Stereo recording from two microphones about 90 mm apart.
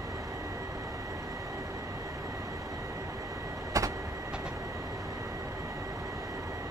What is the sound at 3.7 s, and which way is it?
Vehicle, 40° right (ahead or behind).